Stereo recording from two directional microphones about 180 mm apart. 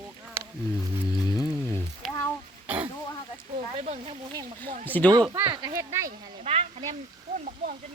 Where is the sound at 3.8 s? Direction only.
35° right (ahead or behind).